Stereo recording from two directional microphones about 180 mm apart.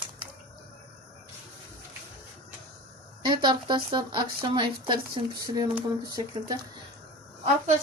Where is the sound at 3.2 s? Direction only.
25° right (ahead or behind).